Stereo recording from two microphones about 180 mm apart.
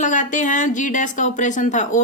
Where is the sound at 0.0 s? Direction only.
45° left (ahead or behind).